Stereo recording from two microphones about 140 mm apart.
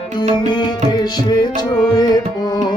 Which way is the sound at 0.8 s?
30° left (ahead or behind).